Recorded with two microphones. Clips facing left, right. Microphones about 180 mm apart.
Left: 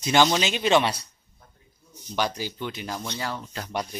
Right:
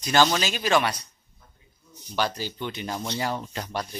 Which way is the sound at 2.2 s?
15° left (ahead or behind).